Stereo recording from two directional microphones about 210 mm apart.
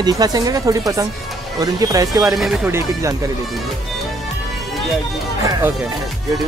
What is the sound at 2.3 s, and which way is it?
Speech, centre (ahead or behind).